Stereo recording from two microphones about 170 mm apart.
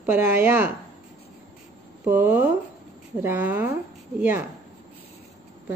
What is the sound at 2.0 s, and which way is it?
Speech, 10° right (ahead or behind).